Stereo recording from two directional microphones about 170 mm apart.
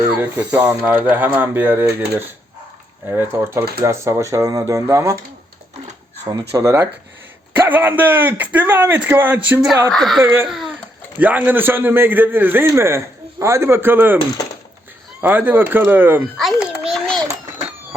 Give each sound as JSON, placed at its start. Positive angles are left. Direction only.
{"t": 0.2, "sound": "a man's voice", "side_deg": -10}
{"t": 6.5, "sound": "a man's voice", "side_deg": -15}
{"t": 15.2, "sound": "a man's voice", "side_deg": -10}
{"t": 16.4, "sound": "babbling", "side_deg": 0}